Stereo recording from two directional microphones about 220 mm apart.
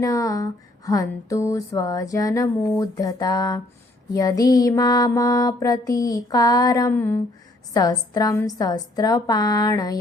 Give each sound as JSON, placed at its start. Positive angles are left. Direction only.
{"t": 0.0, "sound": "mantra", "side_deg": 15}